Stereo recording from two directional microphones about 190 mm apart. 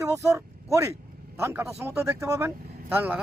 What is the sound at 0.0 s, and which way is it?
Speech, 15° right (ahead or behind).